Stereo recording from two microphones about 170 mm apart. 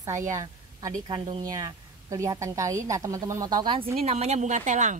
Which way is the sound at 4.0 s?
40° right (ahead or behind).